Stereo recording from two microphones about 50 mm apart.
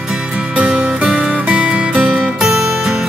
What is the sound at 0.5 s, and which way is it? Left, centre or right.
Music, right.